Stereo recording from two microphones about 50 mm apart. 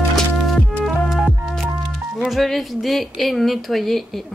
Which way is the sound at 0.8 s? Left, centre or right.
Centre.